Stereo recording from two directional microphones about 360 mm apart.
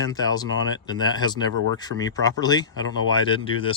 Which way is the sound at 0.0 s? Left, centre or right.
Centre.